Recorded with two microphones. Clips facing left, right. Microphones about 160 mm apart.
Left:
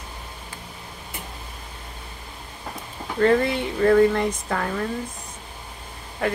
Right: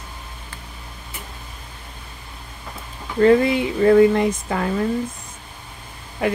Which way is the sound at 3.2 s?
10° right (ahead or behind).